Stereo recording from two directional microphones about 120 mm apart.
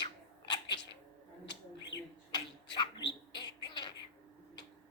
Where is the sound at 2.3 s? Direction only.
40° left (ahead or behind).